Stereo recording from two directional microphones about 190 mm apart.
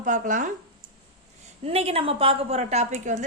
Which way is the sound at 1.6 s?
30° right (ahead or behind).